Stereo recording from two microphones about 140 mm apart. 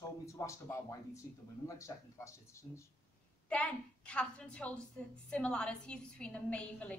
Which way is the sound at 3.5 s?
10° left (ahead or behind).